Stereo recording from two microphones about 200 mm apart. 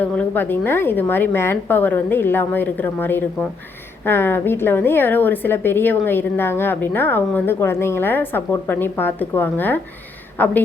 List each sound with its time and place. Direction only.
0.0 s a woman's voice: 10° left (ahead or behind)